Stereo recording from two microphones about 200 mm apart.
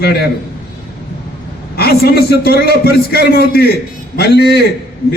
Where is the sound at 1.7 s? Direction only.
50° left (ahead or behind).